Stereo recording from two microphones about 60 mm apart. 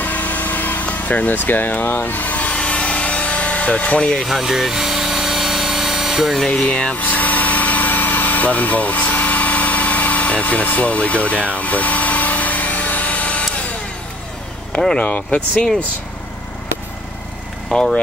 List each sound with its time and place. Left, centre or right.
0.0 s vehicle: left
4.2 s vehicle: centre
6.4 s speech: centre
7.0 s engine: left
11.4 s a sound: left
14.8 s speech: centre
15.0 s speech: left
17.7 s speech: centre